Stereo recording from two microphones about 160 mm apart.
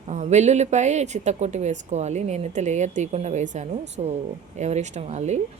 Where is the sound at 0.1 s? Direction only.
45° right (ahead or behind).